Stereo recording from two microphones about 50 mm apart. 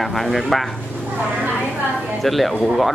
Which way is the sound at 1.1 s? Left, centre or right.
Right.